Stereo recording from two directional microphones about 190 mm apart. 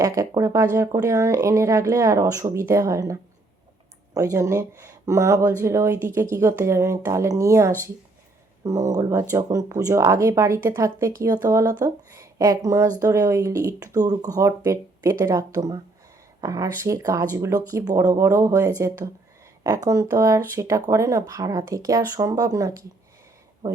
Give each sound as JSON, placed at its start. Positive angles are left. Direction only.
{"t": 0.0, "sound": "speech", "side_deg": -15}